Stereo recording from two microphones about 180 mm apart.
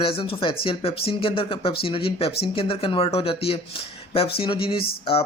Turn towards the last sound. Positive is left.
turn(degrees=30)  # may be behind; listen again after turning